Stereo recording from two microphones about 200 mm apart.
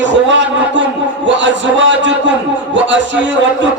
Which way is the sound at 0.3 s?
65° right (ahead or behind).